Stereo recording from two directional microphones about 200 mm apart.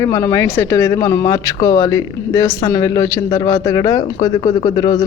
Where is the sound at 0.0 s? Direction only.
15° left (ahead or behind).